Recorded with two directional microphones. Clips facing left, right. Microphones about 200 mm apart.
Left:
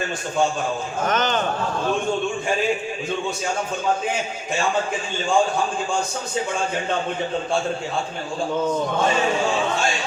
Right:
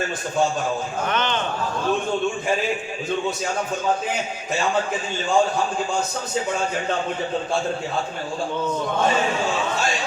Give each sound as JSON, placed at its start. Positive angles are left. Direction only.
{"t": 1.0, "sound": "a man's voice", "side_deg": 40}